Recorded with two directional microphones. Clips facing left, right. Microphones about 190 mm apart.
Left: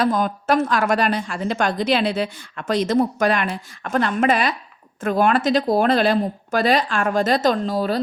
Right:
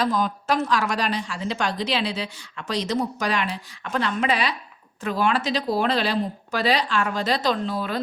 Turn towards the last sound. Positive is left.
turn(degrees=40)  # may be behind; listen again after turning